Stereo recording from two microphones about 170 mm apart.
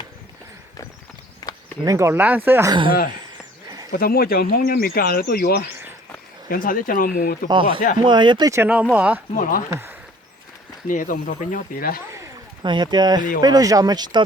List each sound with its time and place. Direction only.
1.4 s a sound: 20° left (ahead or behind)
1.8 s speech: 20° right (ahead or behind)
3.9 s speech: 60° left (ahead or behind)
7.5 s speech: 30° right (ahead or behind); by 9.2 s 5° right (ahead or behind)
9.3 s speech: 55° left (ahead or behind)
10.8 s speech: 50° left (ahead or behind)
12.6 s speech: 25° right (ahead or behind)